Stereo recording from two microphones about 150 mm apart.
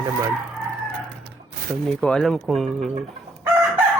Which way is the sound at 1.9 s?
5° left (ahead or behind).